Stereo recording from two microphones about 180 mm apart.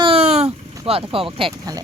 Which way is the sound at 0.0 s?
35° right (ahead or behind).